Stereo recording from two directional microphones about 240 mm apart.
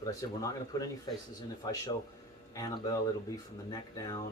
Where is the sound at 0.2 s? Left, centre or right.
Centre.